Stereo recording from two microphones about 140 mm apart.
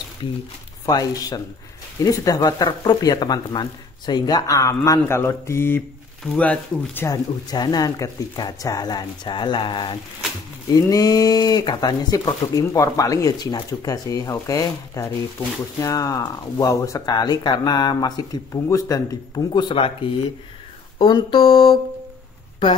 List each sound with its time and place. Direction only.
0.8 s speech: 25° left (ahead or behind)
7.5 s speech: 30° left (ahead or behind)